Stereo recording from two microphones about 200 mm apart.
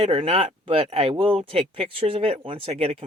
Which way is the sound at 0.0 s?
30° right (ahead or behind).